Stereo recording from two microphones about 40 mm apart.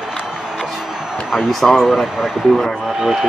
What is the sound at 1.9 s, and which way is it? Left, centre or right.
Speech, centre.